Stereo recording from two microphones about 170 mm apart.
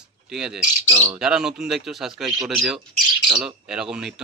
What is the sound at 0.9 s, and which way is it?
Speech, 15° right (ahead or behind).